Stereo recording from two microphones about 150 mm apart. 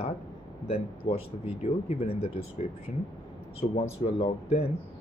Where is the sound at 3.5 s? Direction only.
45° left (ahead or behind).